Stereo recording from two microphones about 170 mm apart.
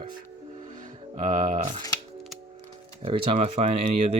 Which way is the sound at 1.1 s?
50° right (ahead or behind).